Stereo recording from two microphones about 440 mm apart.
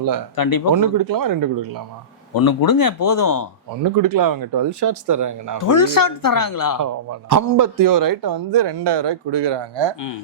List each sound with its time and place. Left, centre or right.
0.3 s speech: left
0.7 s speech: right
2.3 s speech: left
3.8 s speech: right
5.6 s speech: left
6.8 s speech: right